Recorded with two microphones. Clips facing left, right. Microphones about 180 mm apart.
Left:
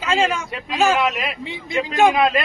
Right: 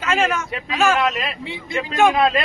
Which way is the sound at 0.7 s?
15° left (ahead or behind).